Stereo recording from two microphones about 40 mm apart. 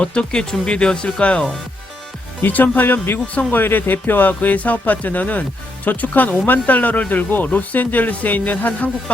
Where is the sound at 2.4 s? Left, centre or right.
Left.